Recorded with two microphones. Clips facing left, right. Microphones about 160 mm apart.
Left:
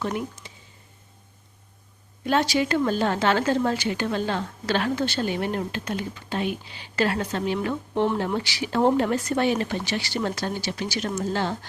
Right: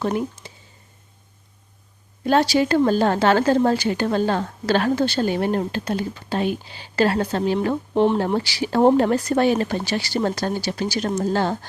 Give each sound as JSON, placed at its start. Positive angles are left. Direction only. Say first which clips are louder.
{"t": 0.0, "sound": "speech", "louder": "right 5 dB", "side_deg": -35}
{"t": 2.2, "sound": "a woman's voice", "louder": "right 5 dB", "side_deg": -35}
{"t": 7.9, "sound": "speech", "louder": "right 5 dB", "side_deg": -20}
{"t": 8.2, "sound": "a woman's voice", "louder": "right 5 dB", "side_deg": -35}